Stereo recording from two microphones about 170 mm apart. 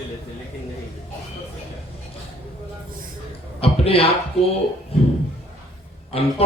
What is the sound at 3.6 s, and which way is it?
Speech, 35° left (ahead or behind).